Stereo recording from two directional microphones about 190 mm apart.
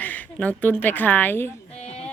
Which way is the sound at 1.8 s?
35° left (ahead or behind).